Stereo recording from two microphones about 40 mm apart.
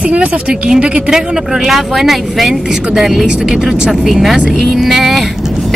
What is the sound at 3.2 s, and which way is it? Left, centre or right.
A woman's voice, centre.